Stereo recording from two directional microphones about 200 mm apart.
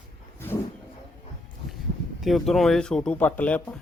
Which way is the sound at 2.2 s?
Centre (ahead or behind).